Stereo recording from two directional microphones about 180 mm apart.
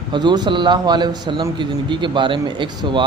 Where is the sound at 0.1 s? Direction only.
25° right (ahead or behind).